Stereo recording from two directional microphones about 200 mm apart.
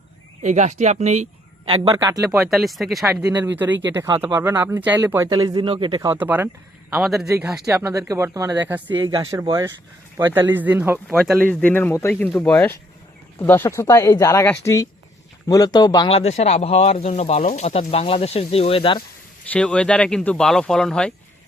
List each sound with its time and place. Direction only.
0.4 s speech: 35° right (ahead or behind)
1.9 s speech: 15° right (ahead or behind)
2.3 s speech: centre (ahead or behind)
3.2 s speech: 15° right (ahead or behind)
7.6 s speech: 15° right (ahead or behind)
11.1 s speech: centre (ahead or behind); by 19.0 s 25° left (ahead or behind)
19.5 s speech: 5° left (ahead or behind)